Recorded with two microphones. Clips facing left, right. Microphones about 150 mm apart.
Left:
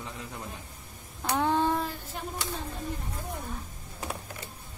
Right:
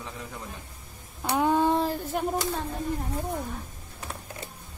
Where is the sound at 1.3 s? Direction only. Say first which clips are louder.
Right 3 dB; 10° right (ahead or behind).